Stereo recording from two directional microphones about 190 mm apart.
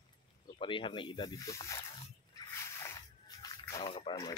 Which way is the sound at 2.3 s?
15° left (ahead or behind).